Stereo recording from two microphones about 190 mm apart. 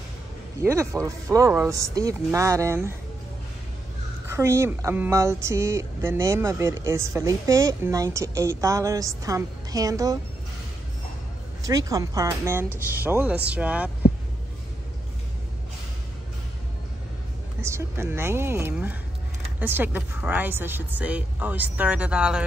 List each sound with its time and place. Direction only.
0.6 s speech: 15° right (ahead or behind)
4.3 s speech: 15° right (ahead or behind)
11.6 s speech: 20° right (ahead or behind)
17.6 s speech: 15° right (ahead or behind)